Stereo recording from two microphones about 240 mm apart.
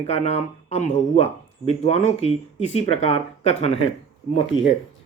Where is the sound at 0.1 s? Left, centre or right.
Left.